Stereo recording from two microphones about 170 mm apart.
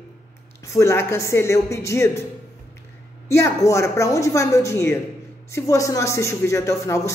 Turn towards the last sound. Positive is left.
turn(degrees=15)  # may be behind; listen again after turning